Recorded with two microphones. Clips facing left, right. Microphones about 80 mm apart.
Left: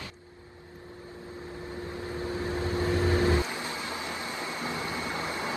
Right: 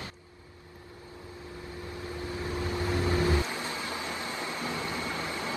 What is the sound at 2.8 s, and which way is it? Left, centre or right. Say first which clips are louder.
Vehicle: left 2 dB; left.